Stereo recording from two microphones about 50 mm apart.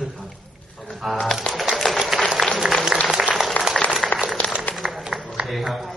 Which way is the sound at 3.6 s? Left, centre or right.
Left.